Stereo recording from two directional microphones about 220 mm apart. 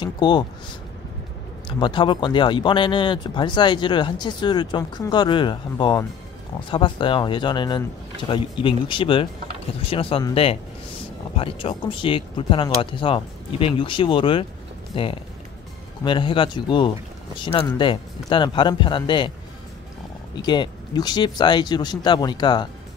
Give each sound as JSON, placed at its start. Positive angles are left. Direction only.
{"t": 0.0, "sound": "speech", "side_deg": 20}
{"t": 1.8, "sound": "speech", "side_deg": 20}
{"t": 20.4, "sound": "speech", "side_deg": 20}